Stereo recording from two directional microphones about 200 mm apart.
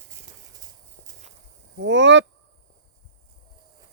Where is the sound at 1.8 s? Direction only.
65° right (ahead or behind).